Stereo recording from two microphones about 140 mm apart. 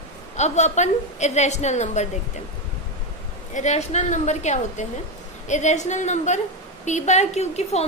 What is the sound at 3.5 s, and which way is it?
A woman's voice, 55° left (ahead or behind).